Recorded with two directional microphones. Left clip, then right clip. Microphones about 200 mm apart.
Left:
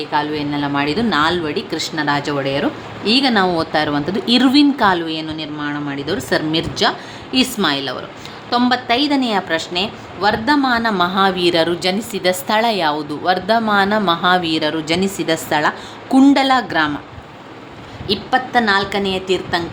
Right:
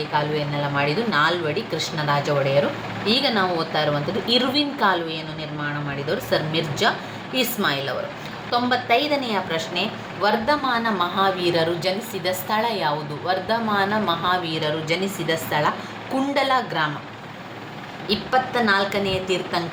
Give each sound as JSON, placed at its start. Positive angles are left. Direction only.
{"t": 0.1, "sound": "a woman's voice", "side_deg": 50}
{"t": 18.1, "sound": "a woman's voice", "side_deg": 40}